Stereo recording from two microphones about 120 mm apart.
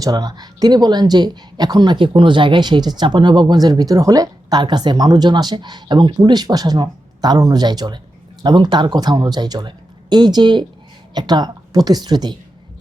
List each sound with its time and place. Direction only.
0.0 s speech: 35° right (ahead or behind)